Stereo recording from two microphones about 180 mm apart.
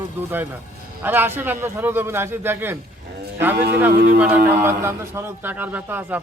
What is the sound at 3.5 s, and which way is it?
Speech, 65° right (ahead or behind).